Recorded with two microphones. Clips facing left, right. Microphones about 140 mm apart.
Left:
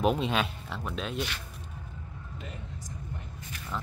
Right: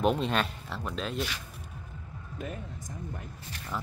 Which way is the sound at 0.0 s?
Centre (ahead or behind).